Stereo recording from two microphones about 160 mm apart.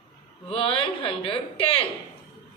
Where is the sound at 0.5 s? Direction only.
35° left (ahead or behind).